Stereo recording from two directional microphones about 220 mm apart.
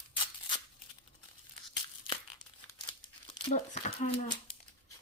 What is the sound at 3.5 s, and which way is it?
Speech, 35° left (ahead or behind).